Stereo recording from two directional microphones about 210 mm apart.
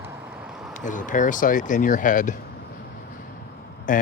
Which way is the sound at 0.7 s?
35° left (ahead or behind).